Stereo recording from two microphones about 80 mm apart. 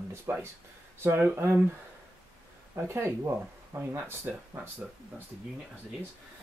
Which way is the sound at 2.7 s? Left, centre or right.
Right.